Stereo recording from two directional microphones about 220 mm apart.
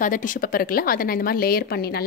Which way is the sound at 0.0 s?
35° left (ahead or behind).